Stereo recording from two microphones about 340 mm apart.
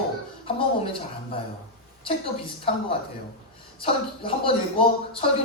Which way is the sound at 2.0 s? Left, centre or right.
Centre.